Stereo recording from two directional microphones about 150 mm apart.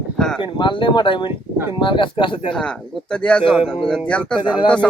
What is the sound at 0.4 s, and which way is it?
Speech, 30° left (ahead or behind).